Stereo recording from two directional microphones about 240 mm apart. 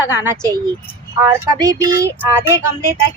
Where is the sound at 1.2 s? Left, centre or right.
Centre.